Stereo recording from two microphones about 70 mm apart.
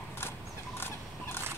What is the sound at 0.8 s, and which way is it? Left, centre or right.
Turkey, left.